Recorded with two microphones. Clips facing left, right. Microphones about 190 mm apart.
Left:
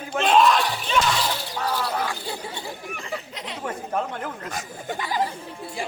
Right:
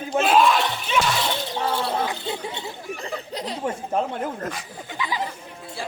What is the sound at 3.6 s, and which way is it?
Speech, 25° right (ahead or behind).